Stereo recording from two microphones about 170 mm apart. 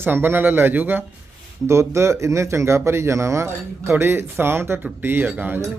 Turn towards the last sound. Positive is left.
turn(degrees=-10)  # may be behind; listen again after turning